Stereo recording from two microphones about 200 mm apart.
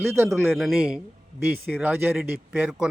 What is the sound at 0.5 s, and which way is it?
A man's voice, centre (ahead or behind).